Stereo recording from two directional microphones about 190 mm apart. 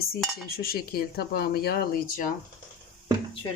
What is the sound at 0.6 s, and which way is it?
Speech, 55° left (ahead or behind).